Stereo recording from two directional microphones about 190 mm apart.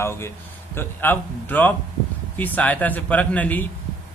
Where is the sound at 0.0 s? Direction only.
15° left (ahead or behind).